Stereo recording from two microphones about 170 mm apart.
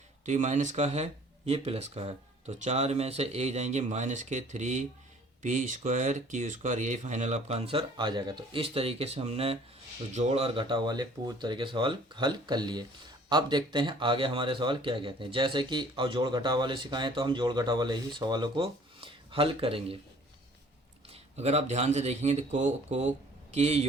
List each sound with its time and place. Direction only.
0.3 s speech: 45° right (ahead or behind)
21.1 s a man's voice: 40° right (ahead or behind)